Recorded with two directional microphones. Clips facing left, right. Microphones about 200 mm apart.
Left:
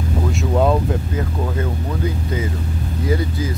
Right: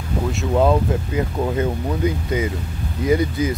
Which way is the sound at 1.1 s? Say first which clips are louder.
Right 2 dB; 20° right (ahead or behind).